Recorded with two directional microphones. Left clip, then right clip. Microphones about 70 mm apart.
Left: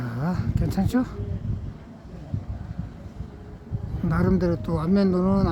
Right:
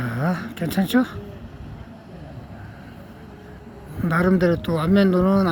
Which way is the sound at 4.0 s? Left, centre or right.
Centre.